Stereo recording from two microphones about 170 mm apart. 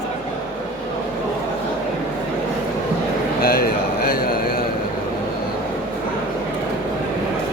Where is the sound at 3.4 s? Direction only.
60° left (ahead or behind).